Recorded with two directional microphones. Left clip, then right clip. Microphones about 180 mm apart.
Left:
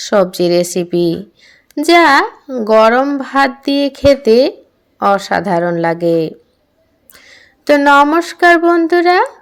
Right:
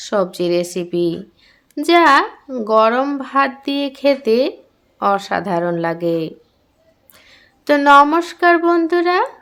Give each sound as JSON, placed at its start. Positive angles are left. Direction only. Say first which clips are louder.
{"t": 0.0, "sound": "speech", "louder": "left 6 dB", "side_deg": 25}